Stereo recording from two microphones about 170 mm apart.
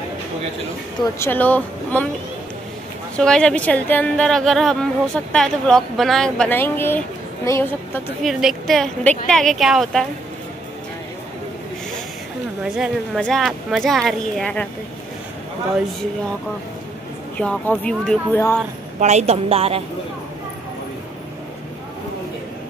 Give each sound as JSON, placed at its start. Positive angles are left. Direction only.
{"t": 1.2, "sound": "speech", "side_deg": 10}
{"t": 3.2, "sound": "a woman's voice", "side_deg": 5}
{"t": 8.2, "sound": "a woman's voice", "side_deg": 0}
{"t": 12.6, "sound": "a woman's voice", "side_deg": -5}
{"t": 17.4, "sound": "speech", "side_deg": 5}
{"t": 18.9, "sound": "a woman's voice", "side_deg": -40}